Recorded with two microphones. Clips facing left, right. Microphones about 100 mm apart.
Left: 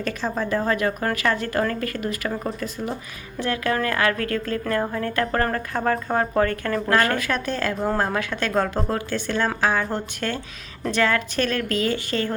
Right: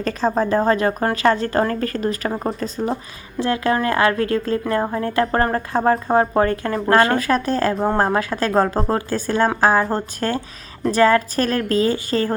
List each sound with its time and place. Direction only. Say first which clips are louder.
0.0 s a woman's voice: right 6 dB; 35° right (ahead or behind)
7.2 s a woman's voice: right 6 dB; 35° right (ahead or behind)